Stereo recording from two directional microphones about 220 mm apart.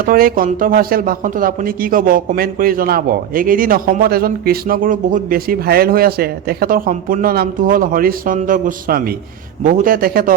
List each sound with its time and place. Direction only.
0.0 s speech: 40° right (ahead or behind)